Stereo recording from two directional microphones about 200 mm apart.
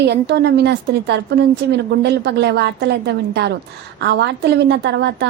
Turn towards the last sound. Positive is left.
turn(degrees=-60)  # may be behind; listen again after turning